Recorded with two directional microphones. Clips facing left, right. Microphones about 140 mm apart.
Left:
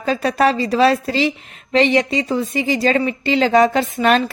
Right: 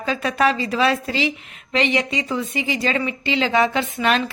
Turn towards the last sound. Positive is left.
turn(degrees=45)  # may be behind; listen again after turning